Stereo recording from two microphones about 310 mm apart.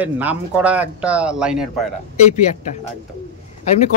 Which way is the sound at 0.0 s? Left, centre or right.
Centre.